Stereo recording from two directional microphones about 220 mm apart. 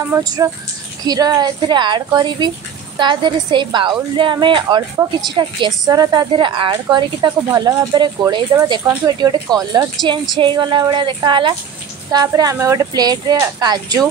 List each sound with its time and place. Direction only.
0.1 s a woman's voice: 15° right (ahead or behind)